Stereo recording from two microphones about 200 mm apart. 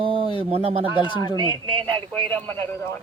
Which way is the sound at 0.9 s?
25° left (ahead or behind).